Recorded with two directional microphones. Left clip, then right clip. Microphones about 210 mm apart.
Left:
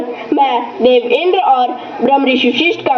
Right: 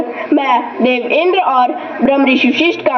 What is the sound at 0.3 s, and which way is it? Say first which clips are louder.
A man's voice: even; 30° right (ahead or behind).